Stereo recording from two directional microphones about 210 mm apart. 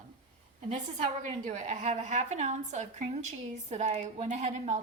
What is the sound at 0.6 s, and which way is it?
A woman's voice, 35° right (ahead or behind).